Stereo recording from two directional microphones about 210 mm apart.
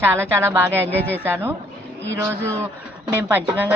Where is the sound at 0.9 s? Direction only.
10° left (ahead or behind).